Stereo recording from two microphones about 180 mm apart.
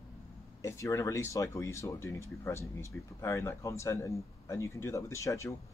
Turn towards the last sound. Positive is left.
turn(degrees=15)  # may be behind; listen again after turning